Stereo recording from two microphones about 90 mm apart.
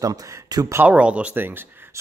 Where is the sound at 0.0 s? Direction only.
45° right (ahead or behind).